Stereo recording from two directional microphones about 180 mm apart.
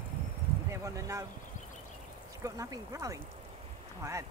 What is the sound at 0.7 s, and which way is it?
Speech, 15° right (ahead or behind).